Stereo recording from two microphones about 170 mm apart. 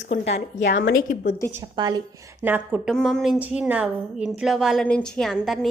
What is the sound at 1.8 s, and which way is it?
Speech, 25° right (ahead or behind).